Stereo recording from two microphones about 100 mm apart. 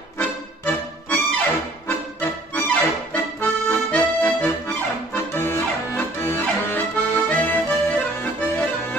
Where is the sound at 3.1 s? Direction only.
25° left (ahead or behind).